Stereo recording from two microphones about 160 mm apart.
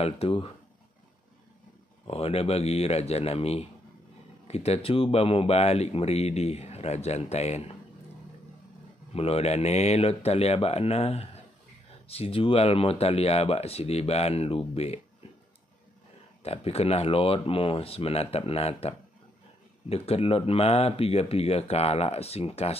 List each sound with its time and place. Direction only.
0.0 s speech: 35° left (ahead or behind)
2.0 s speech: 40° left (ahead or behind)
9.1 s speech: 40° left (ahead or behind)
16.4 s speech: 40° left (ahead or behind)